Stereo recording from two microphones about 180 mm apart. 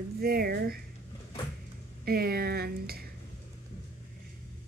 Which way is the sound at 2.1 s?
60° right (ahead or behind).